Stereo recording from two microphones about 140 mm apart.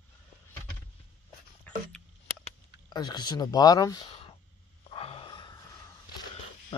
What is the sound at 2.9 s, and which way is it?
Speech, 30° left (ahead or behind).